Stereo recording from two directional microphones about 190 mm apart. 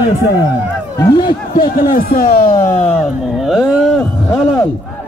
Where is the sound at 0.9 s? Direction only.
25° left (ahead or behind).